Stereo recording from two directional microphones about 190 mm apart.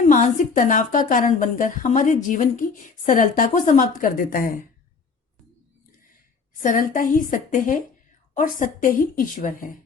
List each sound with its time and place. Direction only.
0.1 s a woman's voice: 45° left (ahead or behind)
6.6 s a woman's voice: 45° left (ahead or behind)